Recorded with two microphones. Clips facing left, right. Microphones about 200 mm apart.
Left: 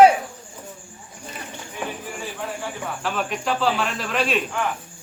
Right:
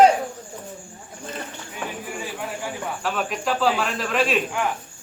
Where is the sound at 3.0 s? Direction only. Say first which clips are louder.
Even; centre (ahead or behind).